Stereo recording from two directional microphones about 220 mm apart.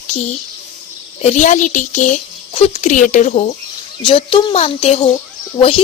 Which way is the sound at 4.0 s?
20° left (ahead or behind).